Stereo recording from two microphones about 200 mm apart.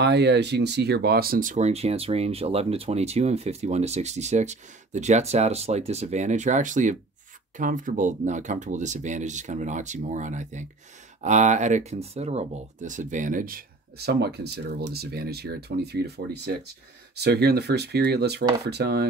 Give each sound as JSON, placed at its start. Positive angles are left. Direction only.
{"t": 0.0, "sound": "speech", "side_deg": -55}